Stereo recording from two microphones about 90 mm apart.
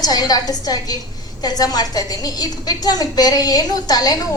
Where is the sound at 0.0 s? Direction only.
45° left (ahead or behind).